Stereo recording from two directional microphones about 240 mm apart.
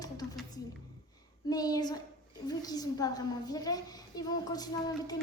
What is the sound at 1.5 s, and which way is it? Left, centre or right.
A woman's voice, centre.